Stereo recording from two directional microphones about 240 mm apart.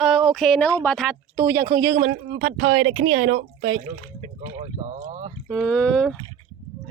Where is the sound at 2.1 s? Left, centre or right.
Right.